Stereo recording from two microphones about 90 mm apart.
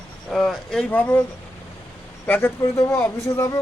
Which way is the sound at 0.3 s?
5° left (ahead or behind).